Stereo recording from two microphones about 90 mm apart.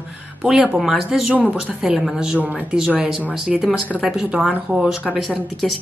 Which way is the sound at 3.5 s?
Centre (ahead or behind).